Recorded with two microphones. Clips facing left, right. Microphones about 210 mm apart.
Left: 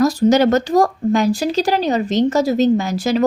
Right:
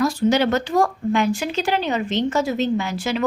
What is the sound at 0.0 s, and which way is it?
Speech, 40° left (ahead or behind).